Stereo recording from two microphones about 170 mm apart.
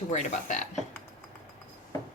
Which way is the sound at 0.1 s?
45° left (ahead or behind).